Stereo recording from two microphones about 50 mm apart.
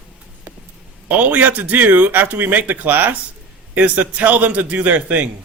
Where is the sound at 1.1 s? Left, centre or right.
Right.